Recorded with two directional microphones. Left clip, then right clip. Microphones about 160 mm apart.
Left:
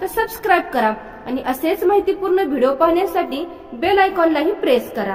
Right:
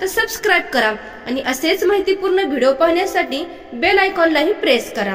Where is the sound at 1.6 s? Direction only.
20° right (ahead or behind).